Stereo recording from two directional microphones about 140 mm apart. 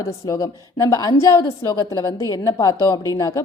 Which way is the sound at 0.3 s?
25° left (ahead or behind).